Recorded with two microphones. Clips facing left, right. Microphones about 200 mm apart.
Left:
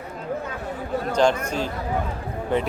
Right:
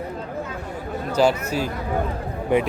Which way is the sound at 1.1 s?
5° right (ahead or behind).